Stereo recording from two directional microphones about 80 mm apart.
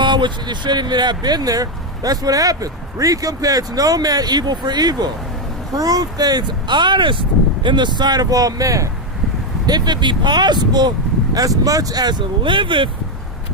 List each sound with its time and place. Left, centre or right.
0.0 s speech: right
9.6 s speech: right
11.3 s speech: right